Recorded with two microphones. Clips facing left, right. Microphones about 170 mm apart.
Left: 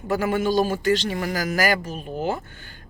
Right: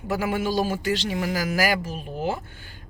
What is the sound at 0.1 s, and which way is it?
Speech, 5° right (ahead or behind).